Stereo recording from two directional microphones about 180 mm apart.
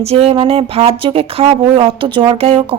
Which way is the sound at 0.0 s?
35° right (ahead or behind).